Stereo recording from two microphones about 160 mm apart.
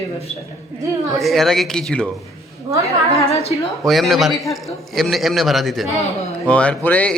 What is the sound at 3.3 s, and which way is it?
Speech, 40° left (ahead or behind).